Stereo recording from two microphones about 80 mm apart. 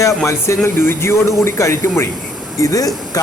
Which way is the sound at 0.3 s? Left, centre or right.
Left.